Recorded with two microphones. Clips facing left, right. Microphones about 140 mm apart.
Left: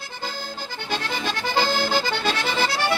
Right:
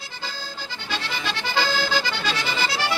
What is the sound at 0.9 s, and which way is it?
Accordion, 50° left (ahead or behind).